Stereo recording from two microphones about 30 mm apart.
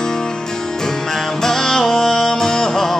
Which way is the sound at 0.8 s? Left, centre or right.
Centre.